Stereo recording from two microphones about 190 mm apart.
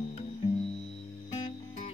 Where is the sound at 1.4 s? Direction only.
30° left (ahead or behind).